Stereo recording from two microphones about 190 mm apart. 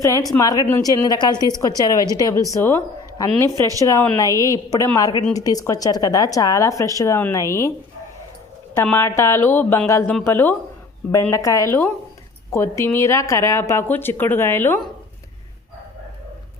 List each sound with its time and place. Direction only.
0.0 s a woman's voice: 15° left (ahead or behind)
8.7 s speech: 10° left (ahead or behind)